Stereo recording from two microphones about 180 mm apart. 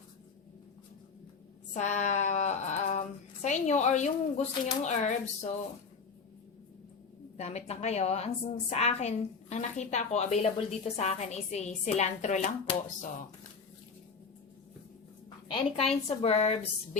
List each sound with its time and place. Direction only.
1.7 s speech: 40° left (ahead or behind)
7.3 s speech: 35° left (ahead or behind)
15.4 s speech: 30° left (ahead or behind)